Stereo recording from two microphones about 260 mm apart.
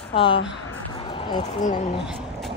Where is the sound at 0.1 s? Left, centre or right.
Centre.